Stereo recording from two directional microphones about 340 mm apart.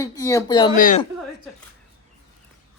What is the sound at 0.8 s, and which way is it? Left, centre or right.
Speech, left.